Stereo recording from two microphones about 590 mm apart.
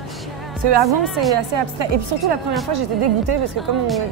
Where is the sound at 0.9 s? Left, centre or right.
Centre.